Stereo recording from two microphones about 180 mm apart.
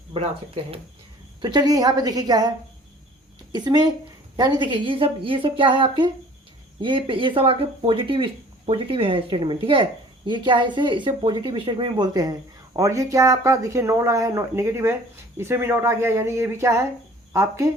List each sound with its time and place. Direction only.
0.1 s speech: 30° right (ahead or behind)
3.5 s speech: 25° right (ahead or behind)